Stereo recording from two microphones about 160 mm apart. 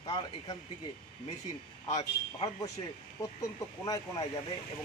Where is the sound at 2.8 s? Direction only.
35° left (ahead or behind).